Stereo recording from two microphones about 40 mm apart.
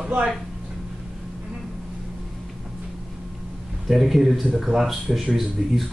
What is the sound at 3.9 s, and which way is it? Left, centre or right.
Speech, centre.